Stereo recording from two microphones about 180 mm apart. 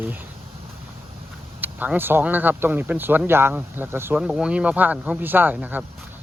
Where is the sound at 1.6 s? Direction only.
10° right (ahead or behind).